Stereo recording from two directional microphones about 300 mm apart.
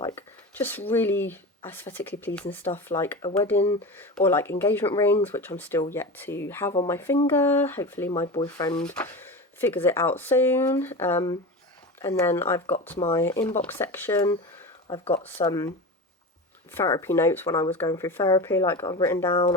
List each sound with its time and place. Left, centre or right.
0.0 s speech: centre
16.7 s speech: centre